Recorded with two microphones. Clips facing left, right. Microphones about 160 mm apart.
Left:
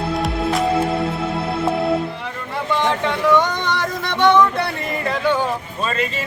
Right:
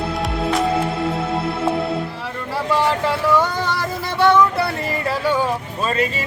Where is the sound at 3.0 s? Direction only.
5° right (ahead or behind).